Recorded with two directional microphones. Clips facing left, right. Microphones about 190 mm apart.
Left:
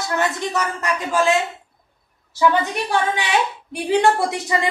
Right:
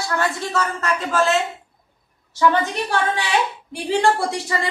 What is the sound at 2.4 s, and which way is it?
Speech, 10° left (ahead or behind).